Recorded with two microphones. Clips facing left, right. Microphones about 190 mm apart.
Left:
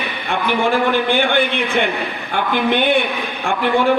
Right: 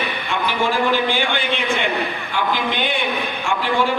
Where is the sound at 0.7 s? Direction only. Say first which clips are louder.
Left 2 dB; 55° left (ahead or behind).